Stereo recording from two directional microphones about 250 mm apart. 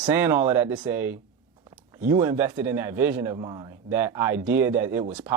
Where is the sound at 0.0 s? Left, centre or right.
Centre.